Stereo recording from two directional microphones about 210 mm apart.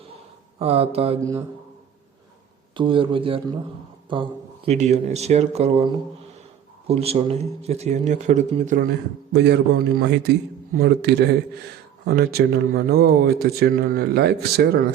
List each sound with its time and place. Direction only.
0.6 s speech: 30° right (ahead or behind)
2.7 s speech: 25° right (ahead or behind); by 14.3 s 50° right (ahead or behind)